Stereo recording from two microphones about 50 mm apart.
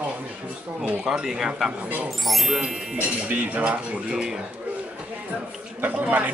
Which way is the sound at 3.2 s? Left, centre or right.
Right.